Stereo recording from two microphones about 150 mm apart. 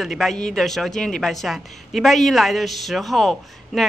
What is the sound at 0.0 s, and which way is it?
Speech, centre (ahead or behind).